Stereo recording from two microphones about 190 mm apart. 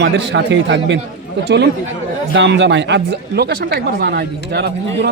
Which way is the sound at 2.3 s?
65° right (ahead or behind).